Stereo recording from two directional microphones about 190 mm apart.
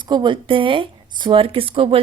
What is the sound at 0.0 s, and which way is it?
A woman's voice, 25° right (ahead or behind).